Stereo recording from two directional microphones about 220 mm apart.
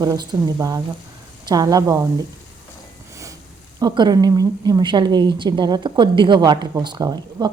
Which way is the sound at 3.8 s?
15° right (ahead or behind).